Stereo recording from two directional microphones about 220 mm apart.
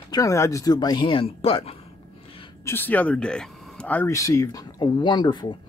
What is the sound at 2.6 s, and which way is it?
Speech, 10° left (ahead or behind).